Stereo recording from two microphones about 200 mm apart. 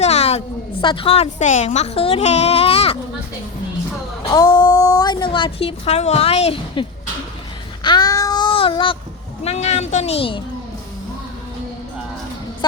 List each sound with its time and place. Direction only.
0.0 s a woman's voice: 30° left (ahead or behind)
4.3 s a woman's voice: 20° left (ahead or behind)
7.9 s child singing: 20° left (ahead or behind)
9.4 s speech: 30° left (ahead or behind)